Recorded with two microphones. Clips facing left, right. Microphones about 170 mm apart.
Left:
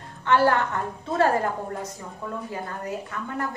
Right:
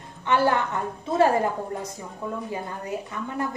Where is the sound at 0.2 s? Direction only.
15° right (ahead or behind).